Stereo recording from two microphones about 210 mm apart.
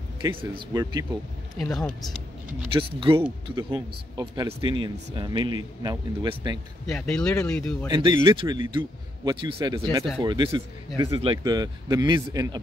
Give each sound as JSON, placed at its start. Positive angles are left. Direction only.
{"t": 0.4, "sound": "speech", "side_deg": -20}
{"t": 1.6, "sound": "speech", "side_deg": 5}
{"t": 2.7, "sound": "speech", "side_deg": -25}
{"t": 6.9, "sound": "speech", "side_deg": 5}
{"t": 7.9, "sound": "speech", "side_deg": -20}